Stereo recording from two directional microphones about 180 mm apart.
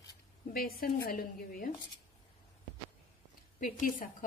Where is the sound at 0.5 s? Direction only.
55° left (ahead or behind).